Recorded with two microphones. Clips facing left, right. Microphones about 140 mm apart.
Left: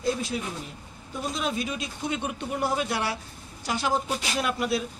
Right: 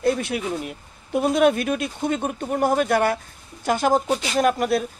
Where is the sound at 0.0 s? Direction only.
65° right (ahead or behind).